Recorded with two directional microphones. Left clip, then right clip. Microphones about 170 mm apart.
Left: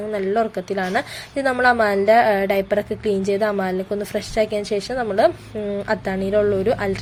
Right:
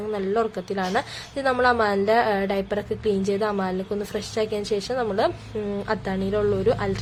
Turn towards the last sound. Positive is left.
turn(degrees=10)  # may be behind; listen again after turning